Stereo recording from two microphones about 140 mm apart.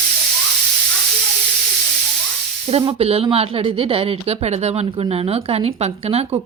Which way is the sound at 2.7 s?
45° right (ahead or behind).